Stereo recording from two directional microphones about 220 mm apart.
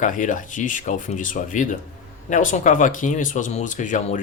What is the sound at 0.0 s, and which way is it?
Speech, 35° left (ahead or behind).